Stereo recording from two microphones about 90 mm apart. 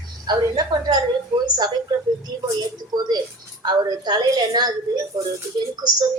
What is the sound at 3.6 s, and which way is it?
A woman's voice, 50° right (ahead or behind).